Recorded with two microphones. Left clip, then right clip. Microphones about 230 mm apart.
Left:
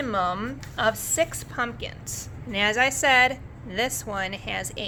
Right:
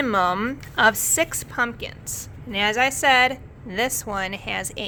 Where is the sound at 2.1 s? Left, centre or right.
Centre.